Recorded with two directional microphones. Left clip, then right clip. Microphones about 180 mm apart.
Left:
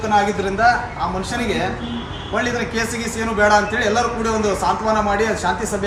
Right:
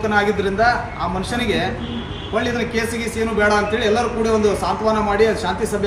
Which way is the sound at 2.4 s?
Centre (ahead or behind).